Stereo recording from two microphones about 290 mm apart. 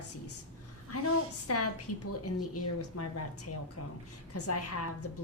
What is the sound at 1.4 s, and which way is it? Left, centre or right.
Speech, left.